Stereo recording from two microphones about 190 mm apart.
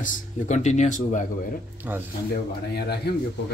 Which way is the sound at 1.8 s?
10° right (ahead or behind).